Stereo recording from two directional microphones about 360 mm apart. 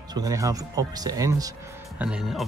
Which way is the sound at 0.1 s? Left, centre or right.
Centre.